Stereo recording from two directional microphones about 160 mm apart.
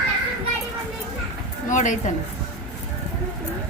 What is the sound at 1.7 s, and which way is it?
Speech, 50° left (ahead or behind).